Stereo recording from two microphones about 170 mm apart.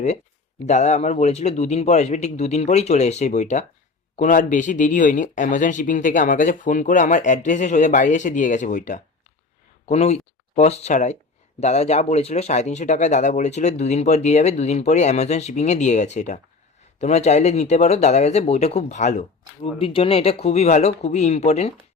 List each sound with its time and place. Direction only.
0.7 s speech: 40° left (ahead or behind)